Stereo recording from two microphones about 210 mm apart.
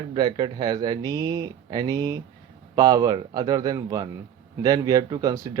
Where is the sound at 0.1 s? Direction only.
20° right (ahead or behind).